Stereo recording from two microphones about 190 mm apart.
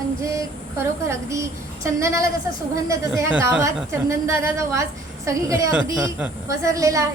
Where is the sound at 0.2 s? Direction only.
15° right (ahead or behind).